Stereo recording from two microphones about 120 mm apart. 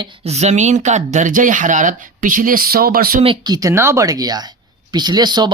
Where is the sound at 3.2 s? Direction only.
40° right (ahead or behind).